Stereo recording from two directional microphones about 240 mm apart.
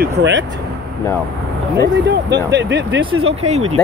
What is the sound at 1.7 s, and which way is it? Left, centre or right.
Speech, right.